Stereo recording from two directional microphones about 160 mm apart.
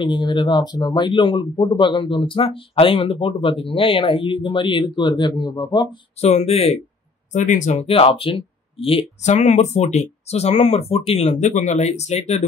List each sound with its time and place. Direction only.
0.0 s speech: 30° left (ahead or behind)
6.2 s speech: 40° left (ahead or behind)
9.2 s speech: 45° left (ahead or behind)